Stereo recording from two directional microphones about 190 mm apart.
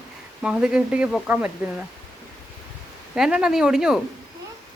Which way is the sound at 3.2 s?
5° right (ahead or behind).